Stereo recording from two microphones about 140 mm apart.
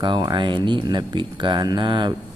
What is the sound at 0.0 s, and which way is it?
Speech, 35° right (ahead or behind).